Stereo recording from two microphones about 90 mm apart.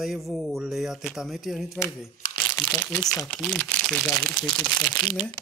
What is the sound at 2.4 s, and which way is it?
Crumpling, 15° left (ahead or behind).